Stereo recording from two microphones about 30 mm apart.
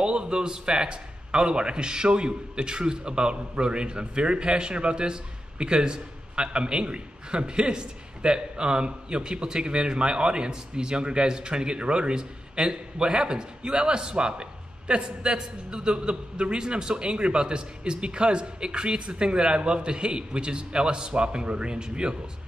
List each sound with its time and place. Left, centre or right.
0.0 s a man's voice: right